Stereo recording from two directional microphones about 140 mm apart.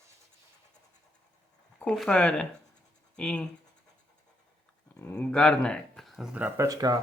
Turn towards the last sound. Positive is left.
turn(degrees=-25)  # may be behind; listen again after turning